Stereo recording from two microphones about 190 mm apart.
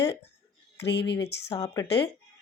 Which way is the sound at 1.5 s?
30° left (ahead or behind).